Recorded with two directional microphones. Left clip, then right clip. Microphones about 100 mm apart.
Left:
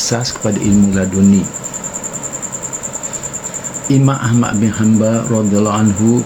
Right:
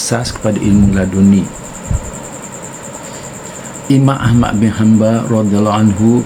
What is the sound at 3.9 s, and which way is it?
Speech, 20° right (ahead or behind).